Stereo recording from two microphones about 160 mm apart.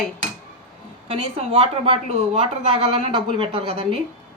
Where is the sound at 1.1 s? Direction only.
40° right (ahead or behind).